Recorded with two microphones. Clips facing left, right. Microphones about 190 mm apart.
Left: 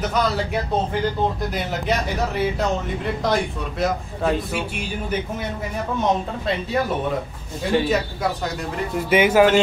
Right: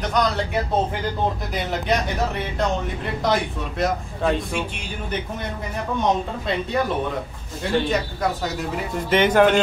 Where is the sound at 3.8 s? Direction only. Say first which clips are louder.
Even; centre (ahead or behind).